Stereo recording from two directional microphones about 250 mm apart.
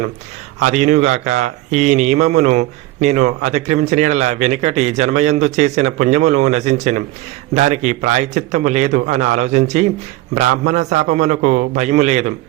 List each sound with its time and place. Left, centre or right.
0.6 s speech: right